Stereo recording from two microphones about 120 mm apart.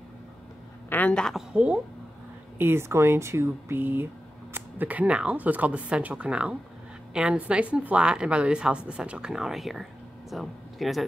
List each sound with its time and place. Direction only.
0.8 s a woman's voice: 15° left (ahead or behind)
1.5 s a woman's voice: 10° right (ahead or behind)